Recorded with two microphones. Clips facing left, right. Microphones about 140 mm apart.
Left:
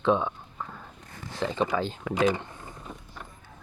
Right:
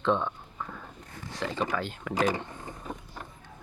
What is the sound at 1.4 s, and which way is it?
Speech, 25° left (ahead or behind).